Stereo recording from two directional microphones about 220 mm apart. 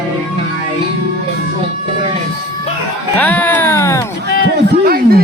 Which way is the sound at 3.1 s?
5° left (ahead or behind).